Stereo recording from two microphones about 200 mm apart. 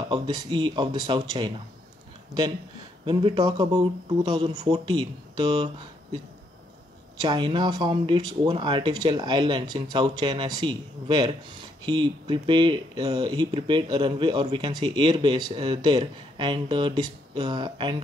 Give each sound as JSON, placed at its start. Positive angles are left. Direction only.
{"t": 0.1, "sound": "speech", "side_deg": -25}
{"t": 3.1, "sound": "speech", "side_deg": -25}
{"t": 7.2, "sound": "speech", "side_deg": -20}